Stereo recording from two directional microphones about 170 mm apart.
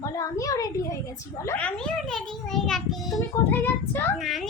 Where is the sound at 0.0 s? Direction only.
20° left (ahead or behind).